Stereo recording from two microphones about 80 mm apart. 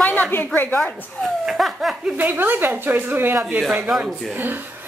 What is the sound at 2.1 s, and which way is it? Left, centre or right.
A woman's voice, right.